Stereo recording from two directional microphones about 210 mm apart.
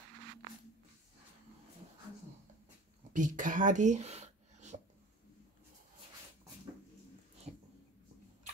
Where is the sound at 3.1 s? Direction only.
40° right (ahead or behind).